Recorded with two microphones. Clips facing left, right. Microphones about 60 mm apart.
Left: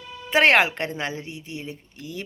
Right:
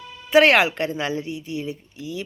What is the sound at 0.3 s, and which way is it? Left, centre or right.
Speech, left.